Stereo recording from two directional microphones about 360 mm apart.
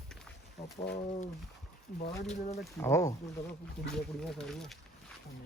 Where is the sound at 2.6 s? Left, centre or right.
Centre.